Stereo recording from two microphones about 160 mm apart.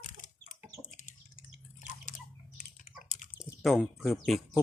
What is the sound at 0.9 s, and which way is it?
Drip, 55° left (ahead or behind).